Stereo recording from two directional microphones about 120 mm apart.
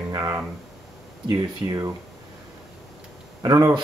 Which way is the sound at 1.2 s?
35° right (ahead or behind).